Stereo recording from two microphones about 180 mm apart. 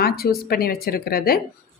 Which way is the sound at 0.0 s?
55° left (ahead or behind).